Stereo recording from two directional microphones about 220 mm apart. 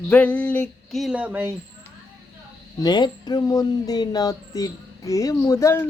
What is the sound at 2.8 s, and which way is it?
Speech, 20° left (ahead or behind).